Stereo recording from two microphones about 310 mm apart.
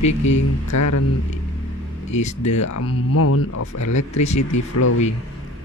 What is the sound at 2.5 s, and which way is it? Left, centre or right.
Speech, left.